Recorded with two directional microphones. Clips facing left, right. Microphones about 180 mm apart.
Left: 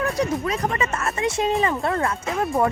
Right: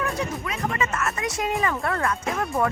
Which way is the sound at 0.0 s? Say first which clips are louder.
Left 5 dB; 35° left (ahead or behind).